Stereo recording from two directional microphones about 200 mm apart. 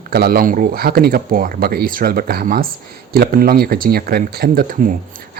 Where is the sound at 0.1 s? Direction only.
50° right (ahead or behind).